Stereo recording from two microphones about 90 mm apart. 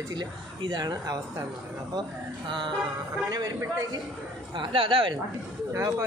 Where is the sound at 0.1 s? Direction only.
55° right (ahead or behind).